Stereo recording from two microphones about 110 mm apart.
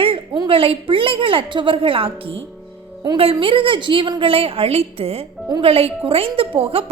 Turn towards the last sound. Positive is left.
turn(degrees=-60)  # may be behind; listen again after turning